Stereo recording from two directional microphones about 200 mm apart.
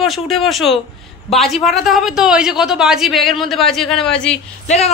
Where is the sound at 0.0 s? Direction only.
Centre (ahead or behind).